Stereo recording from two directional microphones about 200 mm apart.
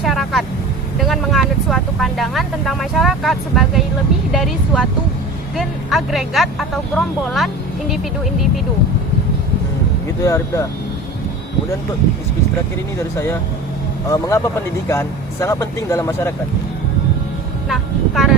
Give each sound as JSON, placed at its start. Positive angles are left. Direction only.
{"t": 0.0, "sound": "vehicle", "side_deg": 0}
{"t": 0.9, "sound": "speech", "side_deg": 0}
{"t": 10.2, "sound": "speech", "side_deg": 15}
{"t": 14.1, "sound": "speech", "side_deg": 15}
{"t": 17.7, "sound": "speech", "side_deg": 0}